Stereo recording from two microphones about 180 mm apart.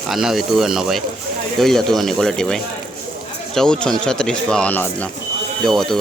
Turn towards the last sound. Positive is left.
turn(degrees=0)  # may be behind; listen again after turning